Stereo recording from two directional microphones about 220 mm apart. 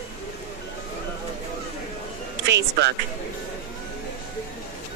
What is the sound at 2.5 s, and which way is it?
Speech, 50° right (ahead or behind).